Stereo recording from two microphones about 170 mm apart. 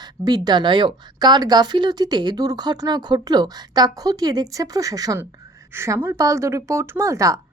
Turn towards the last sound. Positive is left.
turn(degrees=-20)  # may be behind; listen again after turning